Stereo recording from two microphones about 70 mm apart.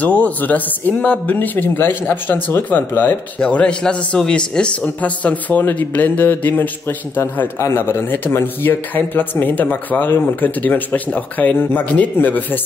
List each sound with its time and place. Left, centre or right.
0.0 s speech: left
3.3 s speech: centre
7.5 s a man's voice: left